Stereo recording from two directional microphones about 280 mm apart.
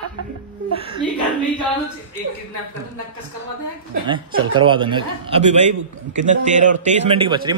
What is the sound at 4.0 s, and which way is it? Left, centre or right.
Speech, centre.